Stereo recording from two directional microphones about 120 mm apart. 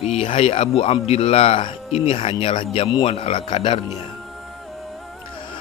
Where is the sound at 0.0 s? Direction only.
50° left (ahead or behind).